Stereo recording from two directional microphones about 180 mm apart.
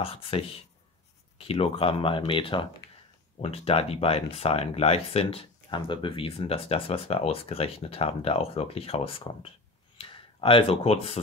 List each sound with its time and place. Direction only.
0.0 s speech: 30° left (ahead or behind)